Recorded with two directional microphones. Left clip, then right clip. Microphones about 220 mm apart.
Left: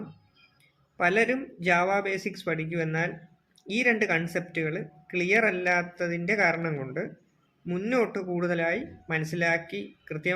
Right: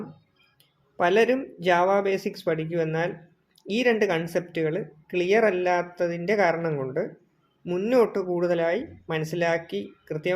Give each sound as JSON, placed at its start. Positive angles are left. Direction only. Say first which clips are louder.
{"t": 0.9, "sound": "speech", "louder": "right 3 dB", "side_deg": -15}